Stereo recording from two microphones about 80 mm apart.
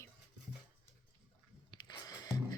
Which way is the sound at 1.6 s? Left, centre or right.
Left.